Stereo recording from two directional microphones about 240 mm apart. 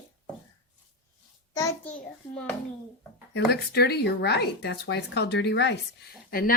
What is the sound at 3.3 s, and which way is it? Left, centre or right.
Speech, left.